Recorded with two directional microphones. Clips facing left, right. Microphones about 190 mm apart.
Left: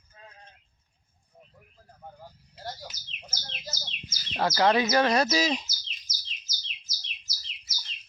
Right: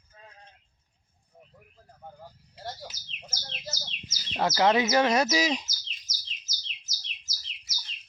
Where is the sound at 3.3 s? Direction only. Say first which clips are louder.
Right 1 dB; 25° right (ahead or behind).